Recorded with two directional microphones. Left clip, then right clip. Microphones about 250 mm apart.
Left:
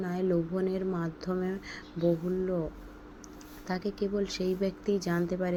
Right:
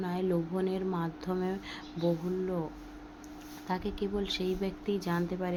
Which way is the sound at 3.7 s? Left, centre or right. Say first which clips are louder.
Left 2 dB; centre.